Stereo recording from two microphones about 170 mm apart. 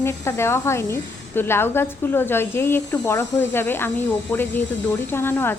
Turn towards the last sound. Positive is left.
turn(degrees=15)  # may be behind; listen again after turning